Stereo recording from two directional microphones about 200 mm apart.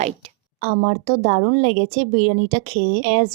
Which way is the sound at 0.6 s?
45° right (ahead or behind).